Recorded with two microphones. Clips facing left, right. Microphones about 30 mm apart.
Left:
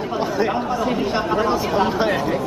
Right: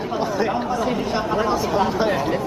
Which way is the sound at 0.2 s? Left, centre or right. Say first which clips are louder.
Left 1 dB; centre.